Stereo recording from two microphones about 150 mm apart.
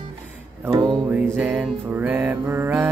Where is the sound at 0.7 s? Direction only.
25° right (ahead or behind).